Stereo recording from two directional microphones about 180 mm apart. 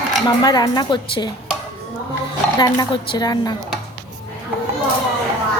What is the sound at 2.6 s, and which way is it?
Speech, 25° left (ahead or behind).